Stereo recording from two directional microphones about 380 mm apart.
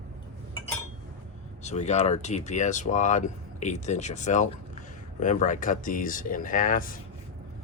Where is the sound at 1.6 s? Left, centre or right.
Centre.